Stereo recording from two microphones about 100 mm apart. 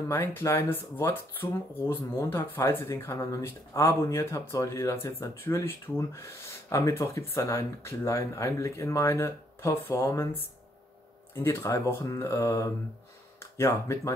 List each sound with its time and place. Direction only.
0.1 s speech: 25° left (ahead or behind)